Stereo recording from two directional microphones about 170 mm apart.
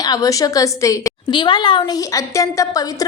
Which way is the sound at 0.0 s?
20° left (ahead or behind).